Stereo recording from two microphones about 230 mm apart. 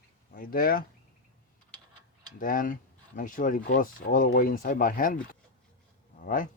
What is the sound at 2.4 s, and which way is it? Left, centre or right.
Speech, left.